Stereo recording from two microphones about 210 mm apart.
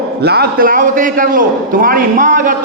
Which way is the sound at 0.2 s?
50° right (ahead or behind).